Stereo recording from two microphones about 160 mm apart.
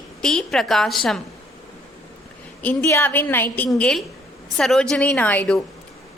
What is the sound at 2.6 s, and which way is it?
A woman's voice, 10° left (ahead or behind).